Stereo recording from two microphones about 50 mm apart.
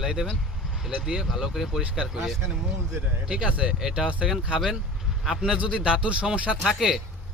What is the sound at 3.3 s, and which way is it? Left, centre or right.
Speech, right.